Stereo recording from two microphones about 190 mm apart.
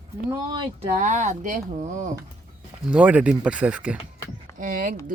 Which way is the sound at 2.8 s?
5° right (ahead or behind).